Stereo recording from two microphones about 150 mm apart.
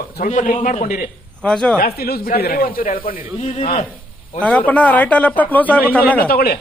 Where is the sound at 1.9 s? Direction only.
90° left; by 3.0 s 65° left (ahead or behind).